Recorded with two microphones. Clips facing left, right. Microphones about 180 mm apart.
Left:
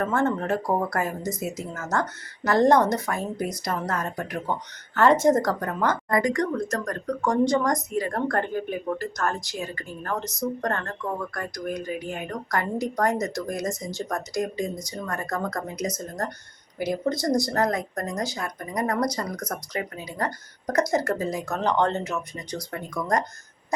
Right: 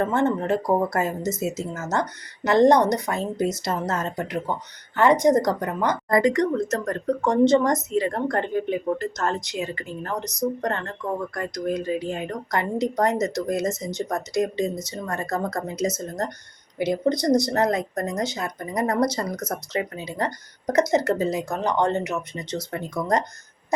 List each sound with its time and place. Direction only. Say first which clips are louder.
0.0 s speech: right 2 dB; 20° right (ahead or behind)
6.1 s speech: right 7 dB; 30° right (ahead or behind)